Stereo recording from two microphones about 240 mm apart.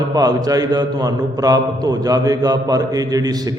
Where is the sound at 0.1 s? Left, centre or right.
Centre.